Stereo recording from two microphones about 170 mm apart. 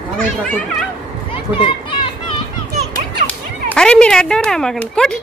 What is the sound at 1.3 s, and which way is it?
Children playing, 30° left (ahead or behind).